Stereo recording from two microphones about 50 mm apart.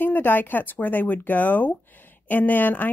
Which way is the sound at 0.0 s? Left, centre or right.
Left.